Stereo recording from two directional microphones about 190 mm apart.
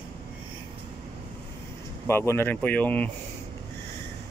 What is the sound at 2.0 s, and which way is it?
Speech, 15° left (ahead or behind).